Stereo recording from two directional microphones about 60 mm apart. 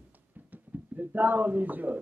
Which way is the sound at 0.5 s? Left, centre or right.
Right.